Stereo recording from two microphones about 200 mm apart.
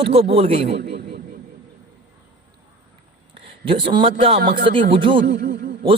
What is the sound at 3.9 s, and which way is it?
Speech, 25° right (ahead or behind).